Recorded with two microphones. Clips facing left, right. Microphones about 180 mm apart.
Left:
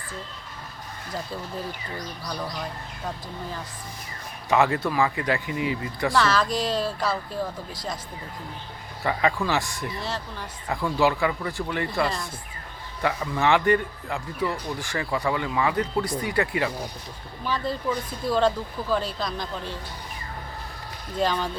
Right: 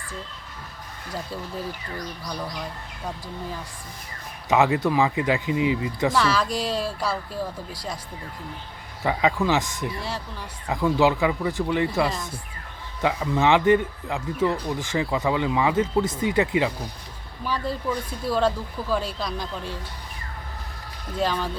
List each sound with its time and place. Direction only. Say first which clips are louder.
4.4 s speech: right 2 dB; 15° right (ahead or behind)
9.0 s speech: right 2 dB; 15° right (ahead or behind)
11.9 s speech: right 2 dB; 5° right (ahead or behind)
21.2 s speech: even; 5° right (ahead or behind)